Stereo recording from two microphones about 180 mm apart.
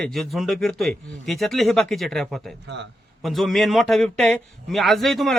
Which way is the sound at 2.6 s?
75° right (ahead or behind).